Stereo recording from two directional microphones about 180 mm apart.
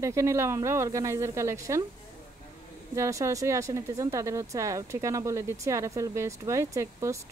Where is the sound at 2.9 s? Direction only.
15° right (ahead or behind).